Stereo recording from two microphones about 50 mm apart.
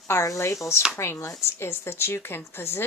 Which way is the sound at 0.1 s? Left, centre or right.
Left.